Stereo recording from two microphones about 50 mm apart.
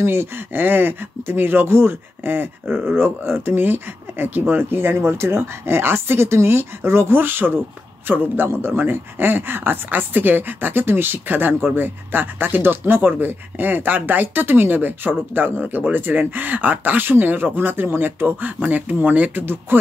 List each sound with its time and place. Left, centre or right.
0.0 s speech: right